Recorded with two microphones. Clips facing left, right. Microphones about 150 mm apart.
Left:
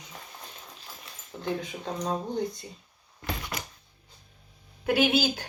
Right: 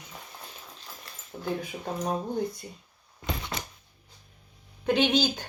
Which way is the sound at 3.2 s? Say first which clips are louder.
Right 1 dB; 25° right (ahead or behind).